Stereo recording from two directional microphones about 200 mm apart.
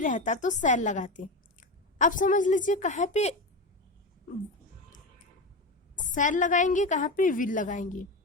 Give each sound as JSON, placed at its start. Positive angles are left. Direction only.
{"t": 0.0, "sound": "a woman's voice", "side_deg": 40}
{"t": 6.0, "sound": "a woman's voice", "side_deg": 40}